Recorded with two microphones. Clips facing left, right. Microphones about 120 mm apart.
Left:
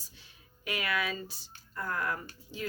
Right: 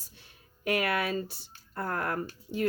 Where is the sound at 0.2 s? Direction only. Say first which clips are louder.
Right 6 dB; 55° right (ahead or behind).